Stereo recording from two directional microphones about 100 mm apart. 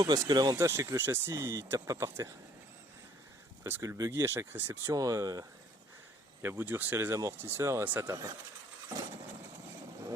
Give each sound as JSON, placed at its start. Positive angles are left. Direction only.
{"t": 0.0, "sound": "speech", "side_deg": -40}
{"t": 0.5, "sound": "speech", "side_deg": -30}
{"t": 3.7, "sound": "speech", "side_deg": -30}
{"t": 4.9, "sound": "speech", "side_deg": -35}
{"t": 6.4, "sound": "speech", "side_deg": -20}